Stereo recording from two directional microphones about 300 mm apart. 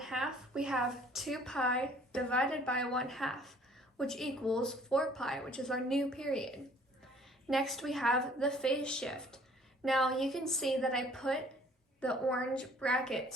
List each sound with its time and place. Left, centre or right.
0.0 s a woman's voice: centre